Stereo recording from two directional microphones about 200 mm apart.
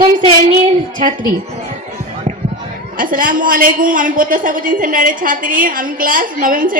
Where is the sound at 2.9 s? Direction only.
40° right (ahead or behind).